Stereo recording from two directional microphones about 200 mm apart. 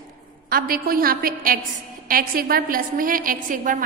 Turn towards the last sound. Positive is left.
turn(degrees=-40)  # may be behind; listen again after turning